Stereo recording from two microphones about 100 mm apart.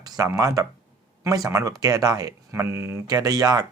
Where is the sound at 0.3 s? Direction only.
35° right (ahead or behind).